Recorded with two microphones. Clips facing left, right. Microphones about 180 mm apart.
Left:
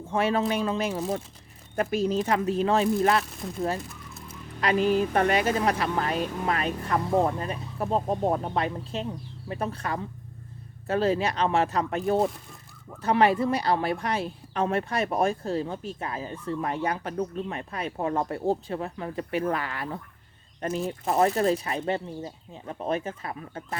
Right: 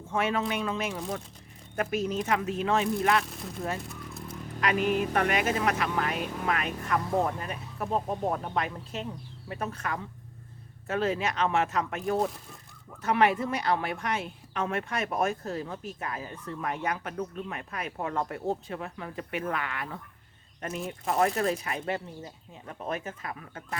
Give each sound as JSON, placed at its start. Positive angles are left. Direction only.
{"t": 0.1, "sound": "speech", "side_deg": 35}
{"t": 3.8, "sound": "a sound", "side_deg": 0}
{"t": 4.6, "sound": "speech", "side_deg": 30}